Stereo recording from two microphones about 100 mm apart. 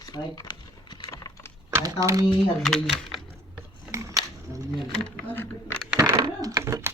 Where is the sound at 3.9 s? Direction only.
30° right (ahead or behind).